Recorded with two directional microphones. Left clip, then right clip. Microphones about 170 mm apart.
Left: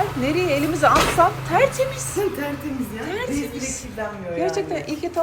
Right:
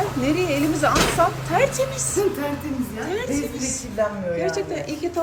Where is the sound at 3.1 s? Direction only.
15° right (ahead or behind).